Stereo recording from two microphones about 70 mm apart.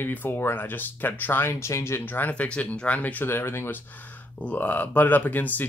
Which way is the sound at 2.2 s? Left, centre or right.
Left.